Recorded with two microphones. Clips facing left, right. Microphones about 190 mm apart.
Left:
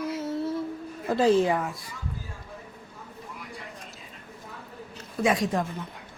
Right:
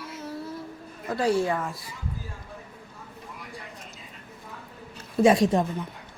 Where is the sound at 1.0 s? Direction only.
25° left (ahead or behind).